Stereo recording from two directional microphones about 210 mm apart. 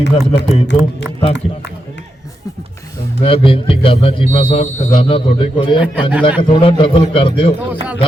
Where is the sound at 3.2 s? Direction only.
25° left (ahead or behind).